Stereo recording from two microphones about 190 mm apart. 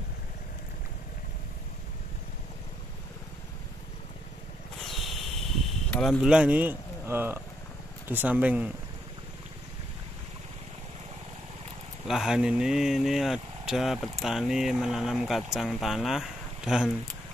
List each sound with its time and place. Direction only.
4.7 s a sound: centre (ahead or behind)
8.1 s speech: 10° right (ahead or behind)
12.1 s speech: 5° right (ahead or behind)